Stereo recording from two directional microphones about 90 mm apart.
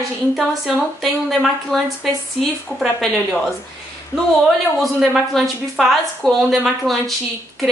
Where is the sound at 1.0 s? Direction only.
Centre (ahead or behind).